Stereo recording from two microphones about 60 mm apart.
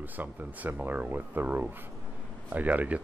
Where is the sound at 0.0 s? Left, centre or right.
Right.